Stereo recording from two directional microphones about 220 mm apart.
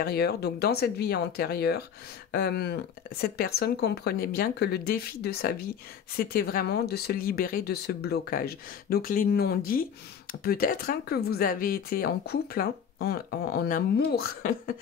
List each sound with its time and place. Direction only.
0.0 s speech: 45° left (ahead or behind)